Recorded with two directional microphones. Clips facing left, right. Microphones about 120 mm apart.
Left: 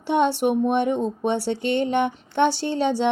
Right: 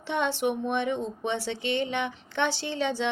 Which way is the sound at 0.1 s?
50° left (ahead or behind).